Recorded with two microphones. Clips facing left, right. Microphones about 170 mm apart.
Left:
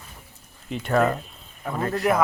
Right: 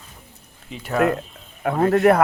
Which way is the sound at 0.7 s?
5° right (ahead or behind).